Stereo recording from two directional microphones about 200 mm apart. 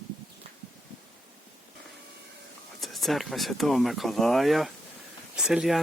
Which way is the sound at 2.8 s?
Centre (ahead or behind).